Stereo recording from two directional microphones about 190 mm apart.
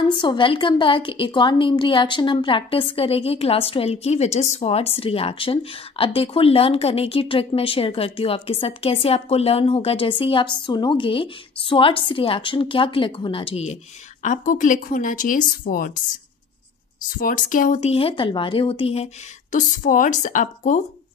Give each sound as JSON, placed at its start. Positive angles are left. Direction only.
{"t": 0.1, "sound": "a woman's voice", "side_deg": 25}
{"t": 17.1, "sound": "speech", "side_deg": 45}
{"t": 19.5, "sound": "speech", "side_deg": 45}